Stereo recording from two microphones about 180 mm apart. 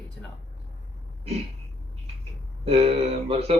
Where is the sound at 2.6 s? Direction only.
35° right (ahead or behind).